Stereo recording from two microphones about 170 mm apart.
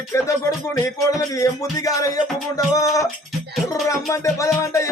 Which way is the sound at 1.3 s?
20° left (ahead or behind).